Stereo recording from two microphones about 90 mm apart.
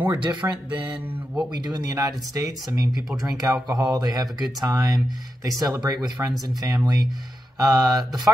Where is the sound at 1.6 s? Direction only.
50° right (ahead or behind).